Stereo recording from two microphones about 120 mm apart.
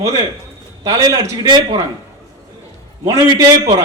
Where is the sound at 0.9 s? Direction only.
30° right (ahead or behind).